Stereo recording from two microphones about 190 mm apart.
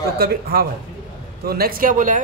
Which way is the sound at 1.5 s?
50° right (ahead or behind).